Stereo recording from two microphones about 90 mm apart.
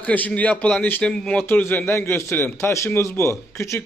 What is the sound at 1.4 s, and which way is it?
A man's voice, 25° left (ahead or behind).